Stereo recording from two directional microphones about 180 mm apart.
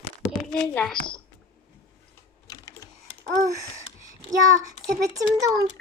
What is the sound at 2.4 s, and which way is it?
Typing, 20° left (ahead or behind).